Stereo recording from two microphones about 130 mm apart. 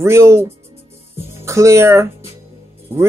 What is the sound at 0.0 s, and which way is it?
Speech, 20° right (ahead or behind).